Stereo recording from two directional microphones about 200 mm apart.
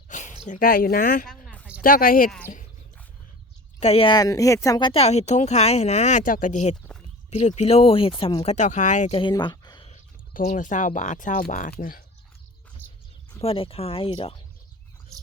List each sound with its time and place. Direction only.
0.1 s speech: 40° left (ahead or behind)
1.3 s a sound: centre (ahead or behind)
1.8 s speech: 45° left (ahead or behind)
3.8 s speech: 30° left (ahead or behind)
9.9 s speech: 35° left (ahead or behind)
13.4 s speech: 30° left (ahead or behind)